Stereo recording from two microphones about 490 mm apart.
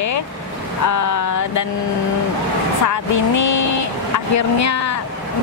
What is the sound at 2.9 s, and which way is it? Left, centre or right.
Speech, left.